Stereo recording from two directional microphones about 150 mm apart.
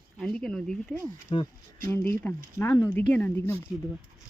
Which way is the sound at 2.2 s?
15° left (ahead or behind).